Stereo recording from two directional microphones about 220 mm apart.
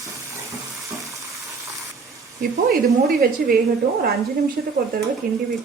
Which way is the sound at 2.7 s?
45° right (ahead or behind).